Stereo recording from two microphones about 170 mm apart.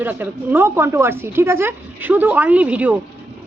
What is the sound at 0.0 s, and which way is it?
Speech, 10° right (ahead or behind).